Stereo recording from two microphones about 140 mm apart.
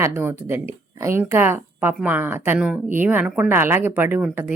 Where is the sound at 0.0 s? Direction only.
15° right (ahead or behind).